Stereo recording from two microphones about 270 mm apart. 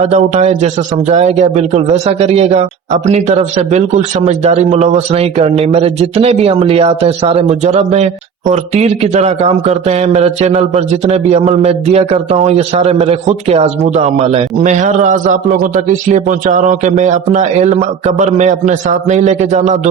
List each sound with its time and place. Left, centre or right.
0.0 s speech: right